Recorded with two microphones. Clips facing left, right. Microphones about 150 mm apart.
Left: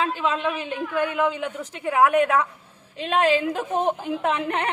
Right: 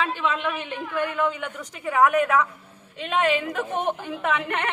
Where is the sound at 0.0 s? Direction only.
35° left (ahead or behind).